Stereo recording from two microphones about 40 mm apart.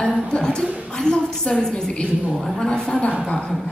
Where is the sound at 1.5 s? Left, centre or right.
Centre.